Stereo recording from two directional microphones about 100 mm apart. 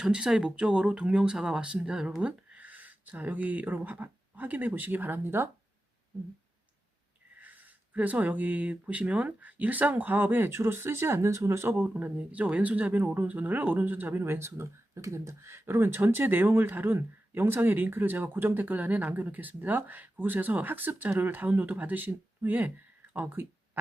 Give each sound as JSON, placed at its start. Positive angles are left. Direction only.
{"t": 0.0, "sound": "speech", "side_deg": -5}
{"t": 7.3, "sound": "speech", "side_deg": -15}
{"t": 11.7, "sound": "speech", "side_deg": -15}